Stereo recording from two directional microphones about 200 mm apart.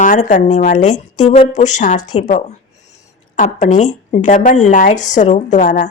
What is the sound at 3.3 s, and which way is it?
Speech, 40° left (ahead or behind).